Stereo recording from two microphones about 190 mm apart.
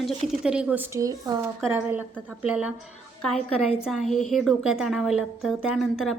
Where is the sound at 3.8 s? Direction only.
Centre (ahead or behind).